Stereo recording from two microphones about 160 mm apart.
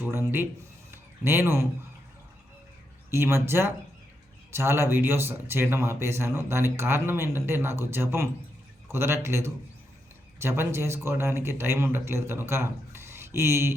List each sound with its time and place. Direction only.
0.3 s speech: 15° right (ahead or behind)
3.1 s speech: 15° right (ahead or behind)